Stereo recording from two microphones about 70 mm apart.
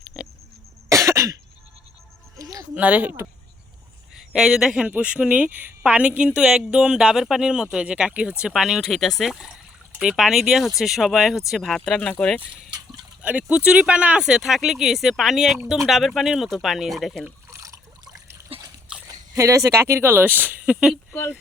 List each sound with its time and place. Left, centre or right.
0.1 s cough: centre
0.9 s cough: right
2.4 s a sound: right
2.7 s speech: right
4.3 s a woman's voice: centre
12.2 s speech: centre
13.2 s a woman's voice: centre
17.5 s water: right
18.3 s trickle: right
19.0 s speech: right